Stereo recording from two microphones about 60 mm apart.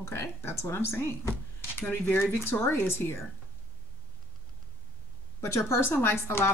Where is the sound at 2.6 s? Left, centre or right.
Left.